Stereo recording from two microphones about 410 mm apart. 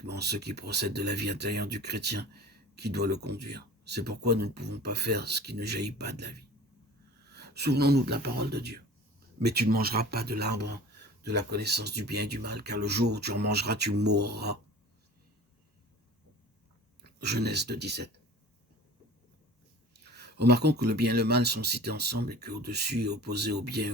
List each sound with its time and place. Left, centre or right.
0.1 s speech: right
17.0 s speech: right
19.9 s speech: right